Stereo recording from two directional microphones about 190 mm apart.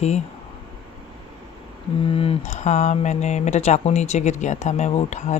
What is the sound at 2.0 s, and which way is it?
Speech, 30° left (ahead or behind).